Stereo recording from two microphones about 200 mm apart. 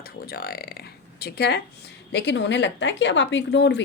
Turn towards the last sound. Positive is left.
turn(degrees=60)  # may be behind; listen again after turning